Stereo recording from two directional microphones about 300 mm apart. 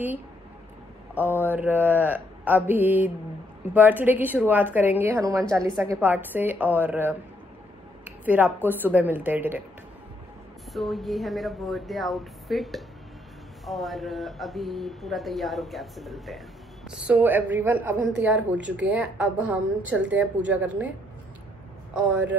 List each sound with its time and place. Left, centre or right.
1.1 s a woman's voice: centre
8.0 s a sound: centre
8.6 s a woman's voice: centre
10.7 s speech: centre
21.9 s speech: centre